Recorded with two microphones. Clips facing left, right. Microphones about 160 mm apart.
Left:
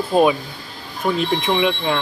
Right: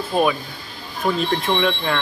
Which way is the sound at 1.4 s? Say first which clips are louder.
Left 2 dB; 5° left (ahead or behind).